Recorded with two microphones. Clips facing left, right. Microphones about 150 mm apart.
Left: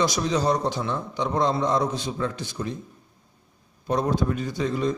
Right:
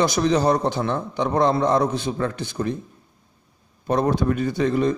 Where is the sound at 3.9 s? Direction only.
60° right (ahead or behind).